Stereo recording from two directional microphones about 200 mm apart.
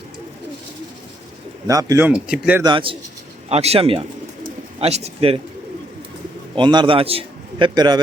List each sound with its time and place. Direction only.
1.6 s speech: 15° right (ahead or behind)
2.6 s a man's voice: 25° right (ahead or behind)
6.6 s a man's voice: 25° right (ahead or behind)